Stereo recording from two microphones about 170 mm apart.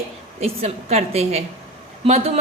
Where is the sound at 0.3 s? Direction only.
35° right (ahead or behind).